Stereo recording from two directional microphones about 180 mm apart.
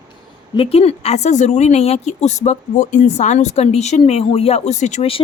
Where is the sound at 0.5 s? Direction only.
35° left (ahead or behind).